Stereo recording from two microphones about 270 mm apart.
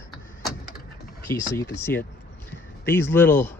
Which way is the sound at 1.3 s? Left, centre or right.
Centre.